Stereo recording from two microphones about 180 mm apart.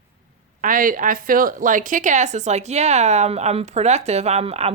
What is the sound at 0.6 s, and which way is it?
A woman's voice, 50° right (ahead or behind).